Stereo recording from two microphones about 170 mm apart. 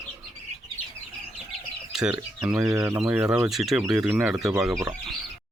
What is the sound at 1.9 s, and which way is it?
Speech, 5° right (ahead or behind).